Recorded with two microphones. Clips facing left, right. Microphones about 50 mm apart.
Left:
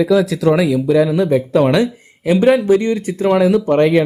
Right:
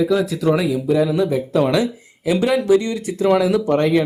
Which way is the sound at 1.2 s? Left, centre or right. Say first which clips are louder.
Left 4 dB; left.